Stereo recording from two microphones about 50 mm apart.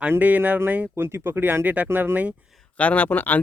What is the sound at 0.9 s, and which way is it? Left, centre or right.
Speech, right.